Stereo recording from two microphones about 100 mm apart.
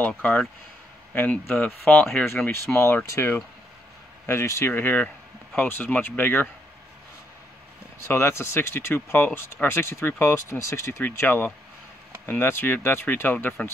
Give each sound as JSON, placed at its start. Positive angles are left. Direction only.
{"t": 1.1, "sound": "speech", "side_deg": 15}
{"t": 2.4, "sound": "speech", "side_deg": 25}
{"t": 8.1, "sound": "speech", "side_deg": 25}